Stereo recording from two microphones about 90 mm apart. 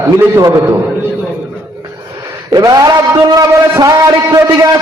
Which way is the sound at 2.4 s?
45° right (ahead or behind).